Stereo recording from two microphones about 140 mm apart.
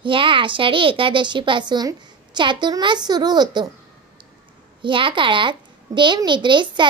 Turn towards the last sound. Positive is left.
turn(degrees=-35)  # may be behind; listen again after turning